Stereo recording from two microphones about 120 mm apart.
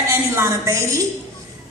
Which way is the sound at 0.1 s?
25° right (ahead or behind).